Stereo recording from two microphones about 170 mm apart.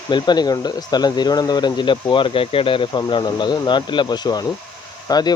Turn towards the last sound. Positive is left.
turn(degrees=25)  # may be behind; listen again after turning